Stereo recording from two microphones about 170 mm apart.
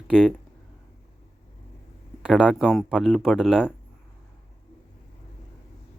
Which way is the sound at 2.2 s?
5° right (ahead or behind).